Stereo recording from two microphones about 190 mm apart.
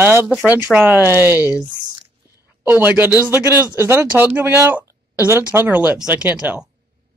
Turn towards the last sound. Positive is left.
turn(degrees=-10)  # may be behind; listen again after turning